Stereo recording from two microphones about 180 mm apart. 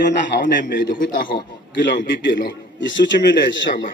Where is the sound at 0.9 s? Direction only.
50° left (ahead or behind).